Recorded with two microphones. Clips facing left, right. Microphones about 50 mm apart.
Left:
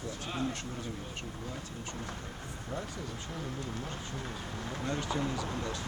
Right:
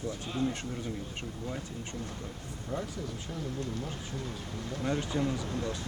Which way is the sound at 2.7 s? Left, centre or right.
Left.